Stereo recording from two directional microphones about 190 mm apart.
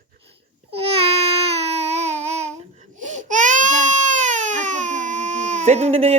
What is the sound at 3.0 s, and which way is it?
Baby cry, 40° right (ahead or behind).